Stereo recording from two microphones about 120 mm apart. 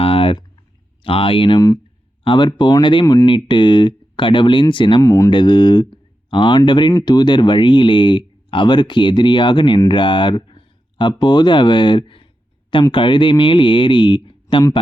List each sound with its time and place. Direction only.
0.0 s typing: 50° left (ahead or behind)
1.0 s speech: 50° left (ahead or behind)
5.0 s speech: 25° left (ahead or behind)
5.3 s speech: 40° left (ahead or behind)